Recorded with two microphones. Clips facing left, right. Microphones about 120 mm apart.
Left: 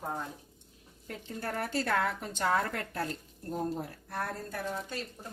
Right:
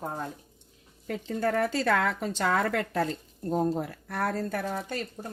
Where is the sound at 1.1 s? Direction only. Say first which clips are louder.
Right 9 dB; 90° right.